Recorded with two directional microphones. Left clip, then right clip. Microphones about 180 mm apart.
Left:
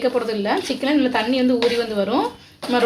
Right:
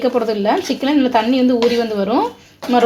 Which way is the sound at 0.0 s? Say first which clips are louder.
Right 4 dB; 35° right (ahead or behind).